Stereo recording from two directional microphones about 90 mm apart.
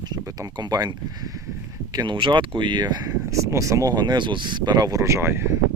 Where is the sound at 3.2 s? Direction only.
35° right (ahead or behind).